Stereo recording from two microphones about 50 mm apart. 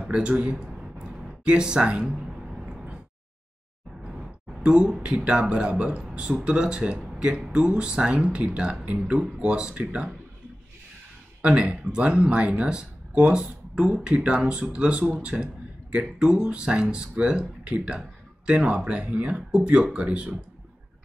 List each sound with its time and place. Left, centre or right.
0.0 s speech: right
1.0 s a sound: centre
4.0 s speech: centre
11.4 s speech: right